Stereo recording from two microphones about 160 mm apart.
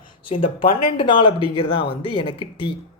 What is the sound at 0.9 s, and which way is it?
Speech, 30° left (ahead or behind).